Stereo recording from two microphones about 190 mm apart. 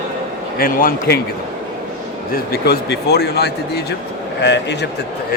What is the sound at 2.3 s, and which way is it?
Speech, 55° left (ahead or behind).